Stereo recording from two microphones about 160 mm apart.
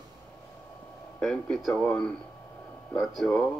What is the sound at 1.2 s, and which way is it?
Speech, 5° left (ahead or behind).